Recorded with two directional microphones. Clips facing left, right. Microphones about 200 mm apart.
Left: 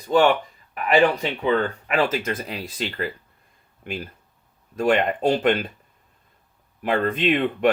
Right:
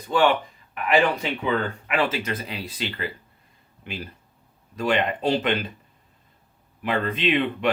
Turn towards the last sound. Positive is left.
turn(degrees=50)  # may be behind; listen again after turning